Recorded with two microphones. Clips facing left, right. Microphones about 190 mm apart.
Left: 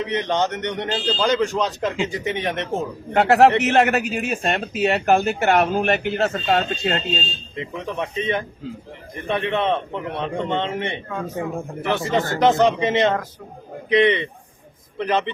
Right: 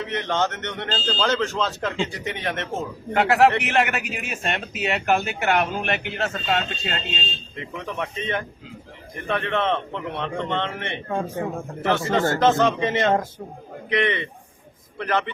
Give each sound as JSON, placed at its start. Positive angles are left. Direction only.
{"t": 0.0, "sound": "speech", "side_deg": 20}
{"t": 3.1, "sound": "a man's voice", "side_deg": 40}
{"t": 7.5, "sound": "speech", "side_deg": 20}
{"t": 11.1, "sound": "a man's voice", "side_deg": -30}
{"t": 11.9, "sound": "speech", "side_deg": 15}